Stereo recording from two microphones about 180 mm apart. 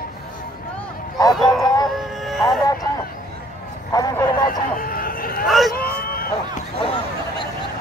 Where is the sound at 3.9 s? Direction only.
20° left (ahead or behind).